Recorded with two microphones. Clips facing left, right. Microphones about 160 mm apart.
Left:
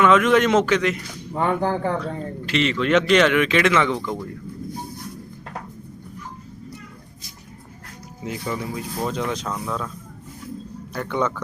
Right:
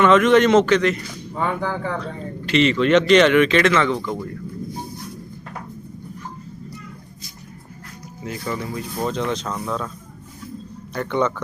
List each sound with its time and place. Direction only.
0.0 s a man's voice: 5° left (ahead or behind)
1.5 s speech: 40° left (ahead or behind)
2.5 s speech: centre (ahead or behind)
4.0 s speech: 5° right (ahead or behind)
8.4 s speech: 5° left (ahead or behind)
10.9 s speech: 5° left (ahead or behind)